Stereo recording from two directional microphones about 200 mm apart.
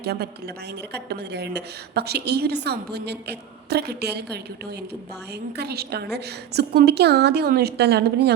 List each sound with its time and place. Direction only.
0.0 s a woman's voice: 50° right (ahead or behind)
5.5 s a woman's voice: 50° right (ahead or behind)